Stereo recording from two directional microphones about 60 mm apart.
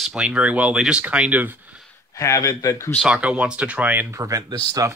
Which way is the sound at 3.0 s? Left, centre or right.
Centre.